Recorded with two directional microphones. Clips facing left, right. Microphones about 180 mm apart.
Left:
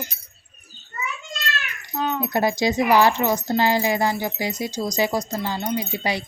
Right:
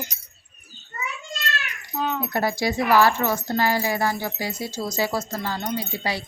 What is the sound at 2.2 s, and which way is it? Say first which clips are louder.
Speech: left 5 dB; 20° left (ahead or behind).